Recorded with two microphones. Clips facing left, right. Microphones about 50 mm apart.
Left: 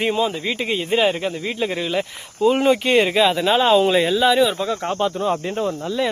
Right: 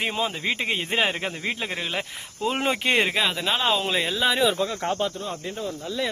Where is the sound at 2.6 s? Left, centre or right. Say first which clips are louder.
Left 3 dB; centre.